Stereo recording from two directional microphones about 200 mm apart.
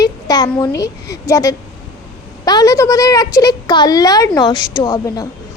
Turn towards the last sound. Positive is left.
turn(degrees=20)  # may be behind; listen again after turning